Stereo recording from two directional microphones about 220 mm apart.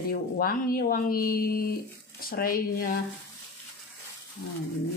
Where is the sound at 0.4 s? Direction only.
40° left (ahead or behind).